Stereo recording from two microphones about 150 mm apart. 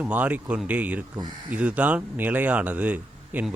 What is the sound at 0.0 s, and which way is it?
Speech, 10° right (ahead or behind).